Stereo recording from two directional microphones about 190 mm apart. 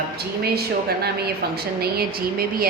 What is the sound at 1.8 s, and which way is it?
Speech, 50° right (ahead or behind).